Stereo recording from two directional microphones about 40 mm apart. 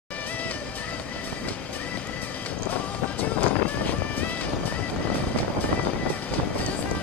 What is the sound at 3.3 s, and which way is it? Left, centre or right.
Music, left.